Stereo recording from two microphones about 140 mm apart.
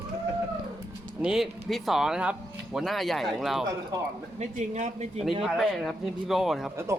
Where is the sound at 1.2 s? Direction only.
5° right (ahead or behind).